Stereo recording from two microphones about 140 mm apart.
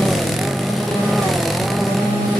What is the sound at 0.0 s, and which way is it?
Vehicle, centre (ahead or behind).